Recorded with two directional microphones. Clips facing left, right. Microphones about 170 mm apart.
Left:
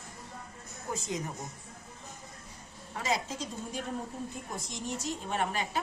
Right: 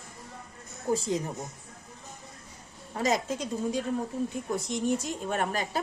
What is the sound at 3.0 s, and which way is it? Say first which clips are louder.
Speech: right 5 dB; 45° right (ahead or behind).